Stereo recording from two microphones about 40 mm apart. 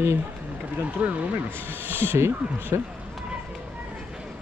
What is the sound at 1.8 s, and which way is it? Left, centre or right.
Speech, right.